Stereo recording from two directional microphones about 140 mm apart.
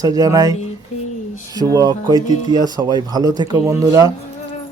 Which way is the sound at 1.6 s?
25° right (ahead or behind).